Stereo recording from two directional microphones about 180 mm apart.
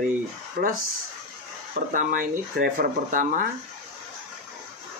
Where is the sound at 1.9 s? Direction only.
45° right (ahead or behind).